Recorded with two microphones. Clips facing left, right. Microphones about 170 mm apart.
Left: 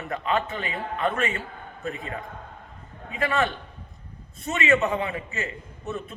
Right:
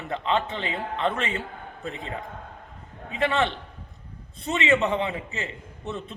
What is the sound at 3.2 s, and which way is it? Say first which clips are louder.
A man's voice: right 1 dB; 20° right (ahead or behind).